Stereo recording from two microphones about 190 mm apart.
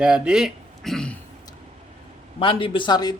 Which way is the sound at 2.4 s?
25° left (ahead or behind).